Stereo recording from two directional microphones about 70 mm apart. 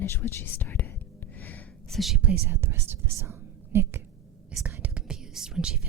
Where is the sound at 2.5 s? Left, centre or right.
Right.